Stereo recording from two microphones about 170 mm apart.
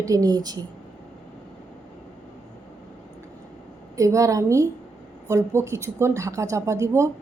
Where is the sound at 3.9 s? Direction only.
20° right (ahead or behind).